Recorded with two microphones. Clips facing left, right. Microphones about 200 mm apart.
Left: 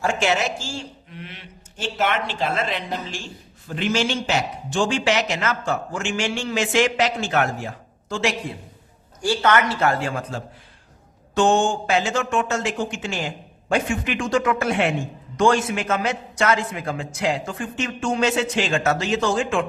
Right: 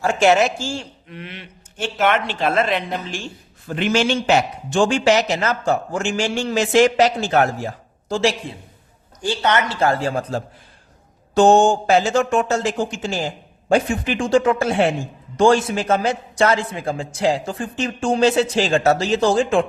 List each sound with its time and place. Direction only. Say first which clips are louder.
1.1 s a sound: right 6 dB; 70° right (ahead or behind)
2.0 s a woman's voice: right 4 dB; 60° right (ahead or behind); by 8.5 s 30° right (ahead or behind)
9.2 s a man's voice: left 1 dB; 20° right (ahead or behind)